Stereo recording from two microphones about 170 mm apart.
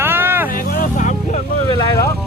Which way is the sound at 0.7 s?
50° left (ahead or behind).